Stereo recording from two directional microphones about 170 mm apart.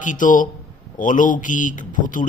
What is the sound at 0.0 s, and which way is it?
Speech, 50° left (ahead or behind).